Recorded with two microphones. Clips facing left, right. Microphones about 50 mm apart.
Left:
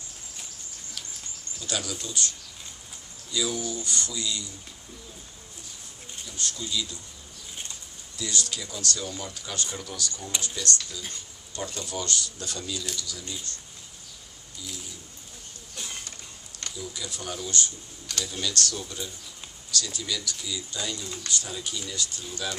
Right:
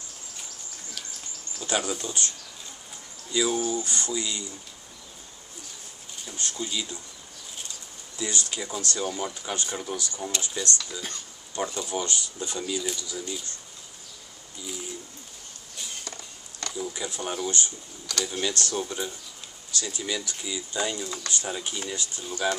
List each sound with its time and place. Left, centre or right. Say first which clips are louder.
1.6 s speech: right 5 dB; right
6.2 s speech: right 2 dB; right
8.2 s speech: right 1 dB; right
16.7 s speech: right 5 dB; right